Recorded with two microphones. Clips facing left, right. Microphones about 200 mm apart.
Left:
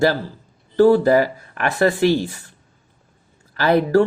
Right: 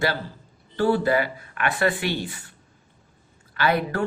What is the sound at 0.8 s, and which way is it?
Speech, 40° left (ahead or behind).